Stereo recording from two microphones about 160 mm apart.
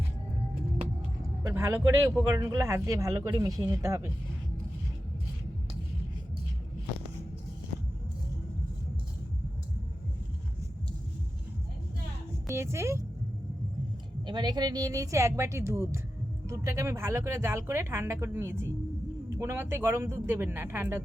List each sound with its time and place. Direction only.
1.5 s speech: 15° right (ahead or behind)
12.5 s speech: 15° right (ahead or behind)
14.3 s speech: 25° right (ahead or behind)